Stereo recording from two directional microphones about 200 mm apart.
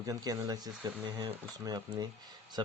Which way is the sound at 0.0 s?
15° right (ahead or behind).